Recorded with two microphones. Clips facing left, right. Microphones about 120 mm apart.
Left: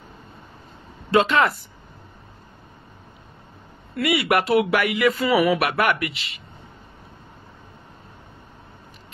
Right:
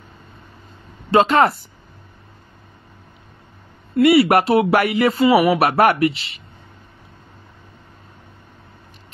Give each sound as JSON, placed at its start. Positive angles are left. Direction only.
{"t": 1.1, "sound": "speech", "side_deg": -35}
{"t": 3.9, "sound": "speech", "side_deg": -30}